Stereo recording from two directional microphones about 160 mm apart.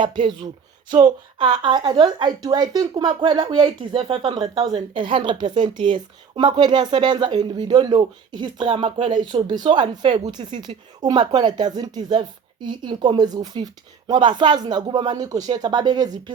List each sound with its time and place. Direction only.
0.0 s a woman's voice: 30° right (ahead or behind)
1.4 s a woman's voice: 30° right (ahead or behind)